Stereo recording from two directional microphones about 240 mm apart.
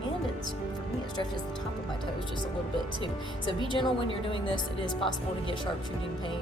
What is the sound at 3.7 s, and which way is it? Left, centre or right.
Speech, left.